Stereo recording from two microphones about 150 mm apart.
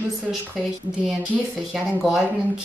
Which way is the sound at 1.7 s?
5° right (ahead or behind).